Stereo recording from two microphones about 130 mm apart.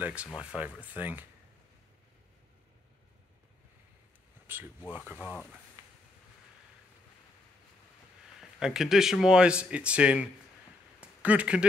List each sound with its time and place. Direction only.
0.0 s speech: 10° right (ahead or behind)
4.5 s speech: 15° right (ahead or behind)
8.4 s speech: 5° right (ahead or behind)
11.0 s a sound: 10° right (ahead or behind)